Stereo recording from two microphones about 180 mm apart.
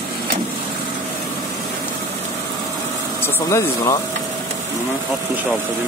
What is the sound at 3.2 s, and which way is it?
Speech, 15° left (ahead or behind).